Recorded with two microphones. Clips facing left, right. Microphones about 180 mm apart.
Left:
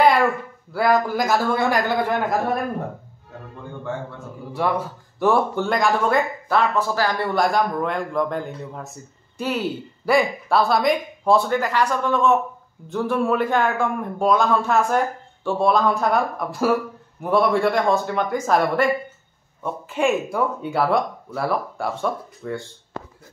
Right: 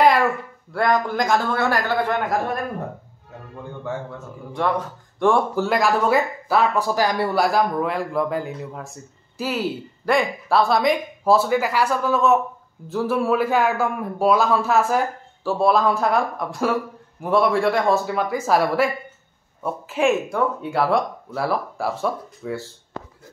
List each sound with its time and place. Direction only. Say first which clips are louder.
0.0 s a sound: even; centre (ahead or behind)
0.7 s speech: left 1 dB; 5° left (ahead or behind)
4.5 s speech: even; 5° left (ahead or behind)